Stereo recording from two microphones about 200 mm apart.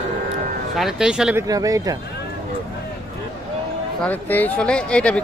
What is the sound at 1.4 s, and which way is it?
Speech, 20° right (ahead or behind).